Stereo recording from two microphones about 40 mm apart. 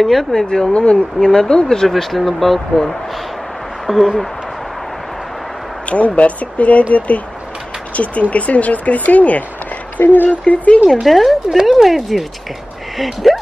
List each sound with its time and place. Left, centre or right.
0.0 s speech: centre
0.3 s speech: centre
1.9 s speech: centre
5.9 s speech: left
11.1 s speech: centre